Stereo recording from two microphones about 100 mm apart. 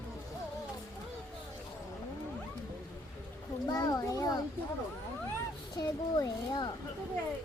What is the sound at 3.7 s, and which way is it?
Speech, 40° left (ahead or behind).